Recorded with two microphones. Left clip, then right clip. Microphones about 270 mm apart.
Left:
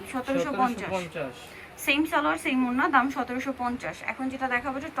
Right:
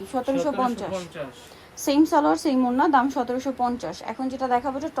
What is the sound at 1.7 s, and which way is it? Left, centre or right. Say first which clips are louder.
Speech: right 5 dB; centre.